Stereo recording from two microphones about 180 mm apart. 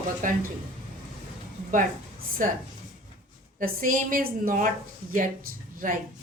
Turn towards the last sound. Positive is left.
turn(degrees=-50)  # may be behind; listen again after turning